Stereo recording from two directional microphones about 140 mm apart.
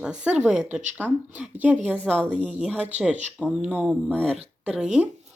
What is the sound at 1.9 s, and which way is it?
Speech, 5° left (ahead or behind).